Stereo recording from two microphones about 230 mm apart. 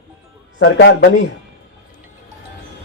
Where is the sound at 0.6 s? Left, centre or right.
Left.